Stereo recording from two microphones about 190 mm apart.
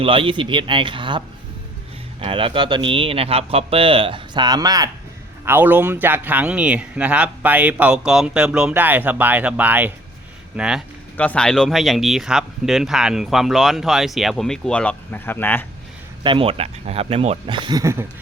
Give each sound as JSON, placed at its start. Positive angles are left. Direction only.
{"t": 0.0, "sound": "speech", "side_deg": -30}
{"t": 2.2, "sound": "speech", "side_deg": -30}
{"t": 5.5, "sound": "speech", "side_deg": -10}
{"t": 16.2, "sound": "speech", "side_deg": -30}